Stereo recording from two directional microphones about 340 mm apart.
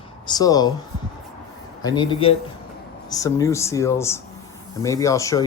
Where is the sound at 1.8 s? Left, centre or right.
Centre.